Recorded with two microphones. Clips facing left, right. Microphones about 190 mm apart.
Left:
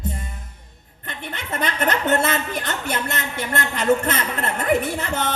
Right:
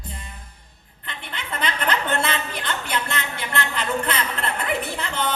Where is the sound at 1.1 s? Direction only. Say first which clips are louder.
Left 3 dB; 45° left (ahead or behind).